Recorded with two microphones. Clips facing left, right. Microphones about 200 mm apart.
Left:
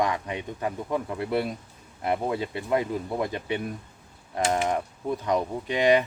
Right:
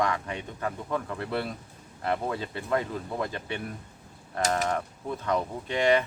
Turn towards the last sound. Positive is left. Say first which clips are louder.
# left 3 dB
turn(degrees=15)  # may be behind; listen again after turning